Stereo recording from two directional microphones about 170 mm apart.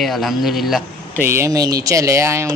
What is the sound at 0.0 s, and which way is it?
A man's voice, centre (ahead or behind).